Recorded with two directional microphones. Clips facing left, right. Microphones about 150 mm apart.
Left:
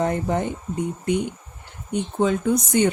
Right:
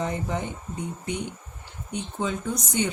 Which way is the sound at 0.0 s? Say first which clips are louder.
Left 6 dB; 50° left (ahead or behind).